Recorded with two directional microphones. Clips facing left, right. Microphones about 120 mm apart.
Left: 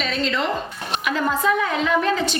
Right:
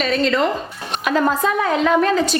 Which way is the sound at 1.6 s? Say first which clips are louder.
Right 4 dB; 40° right (ahead or behind).